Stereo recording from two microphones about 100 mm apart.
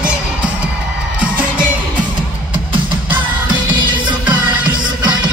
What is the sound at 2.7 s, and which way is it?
Music, 50° right (ahead or behind).